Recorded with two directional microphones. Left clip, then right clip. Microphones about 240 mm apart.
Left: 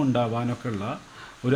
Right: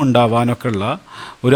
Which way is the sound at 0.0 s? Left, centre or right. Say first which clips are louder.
Right 11 dB; right.